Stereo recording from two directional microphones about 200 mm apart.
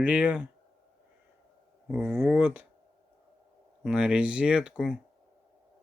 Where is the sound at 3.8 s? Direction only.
5° right (ahead or behind).